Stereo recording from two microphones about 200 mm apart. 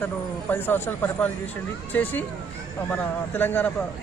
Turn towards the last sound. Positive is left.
turn(degrees=10)  # may be behind; listen again after turning